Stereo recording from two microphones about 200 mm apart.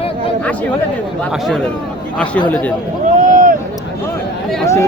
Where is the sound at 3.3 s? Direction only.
40° right (ahead or behind).